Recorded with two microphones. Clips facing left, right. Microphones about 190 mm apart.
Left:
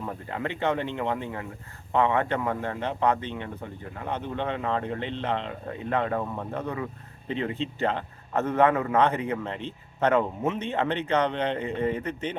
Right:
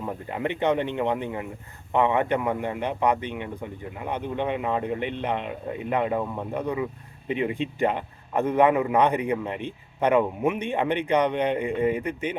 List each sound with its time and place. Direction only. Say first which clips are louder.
0.0 s a man's voice: right 3 dB; 15° right (ahead or behind)